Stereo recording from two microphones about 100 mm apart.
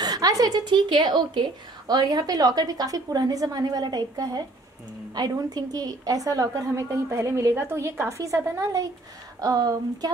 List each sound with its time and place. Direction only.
0.0 s a woman's voice: 40° right (ahead or behind)